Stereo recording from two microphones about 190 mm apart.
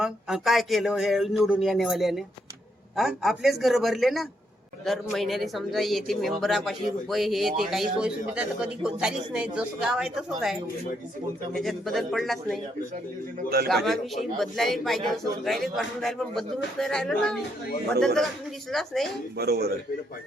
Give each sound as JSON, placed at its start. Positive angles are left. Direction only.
{"t": 0.0, "sound": "a man's voice", "side_deg": 0}
{"t": 13.7, "sound": "a man's voice", "side_deg": 0}
{"t": 19.4, "sound": "a man's voice", "side_deg": -55}